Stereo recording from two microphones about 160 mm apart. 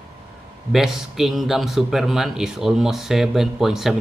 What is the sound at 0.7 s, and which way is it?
Speech, centre (ahead or behind).